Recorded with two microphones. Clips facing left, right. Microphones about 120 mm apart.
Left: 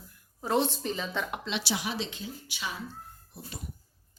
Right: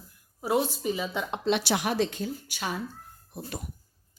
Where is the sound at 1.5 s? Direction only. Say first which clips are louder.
Right 7 dB; 50° right (ahead or behind).